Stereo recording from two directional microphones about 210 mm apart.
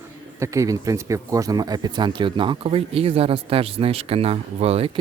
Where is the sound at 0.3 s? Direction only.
15° right (ahead or behind).